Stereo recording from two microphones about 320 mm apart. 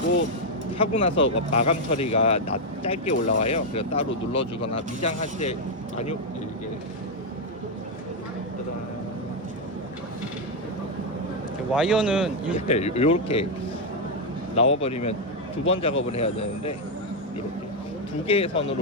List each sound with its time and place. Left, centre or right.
0.8 s speech: centre
11.7 s speech: centre
12.5 s speech: centre
14.5 s speech: centre
18.3 s speech: centre